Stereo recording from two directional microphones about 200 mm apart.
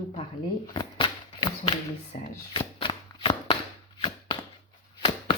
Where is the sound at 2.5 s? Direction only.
25° left (ahead or behind).